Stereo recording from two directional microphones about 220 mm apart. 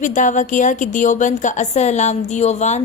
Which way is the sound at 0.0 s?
35° left (ahead or behind).